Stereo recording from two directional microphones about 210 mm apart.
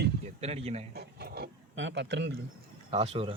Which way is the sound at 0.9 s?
50° right (ahead or behind).